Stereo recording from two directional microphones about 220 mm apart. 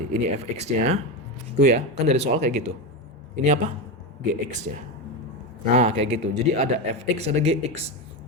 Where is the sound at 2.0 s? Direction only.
30° right (ahead or behind).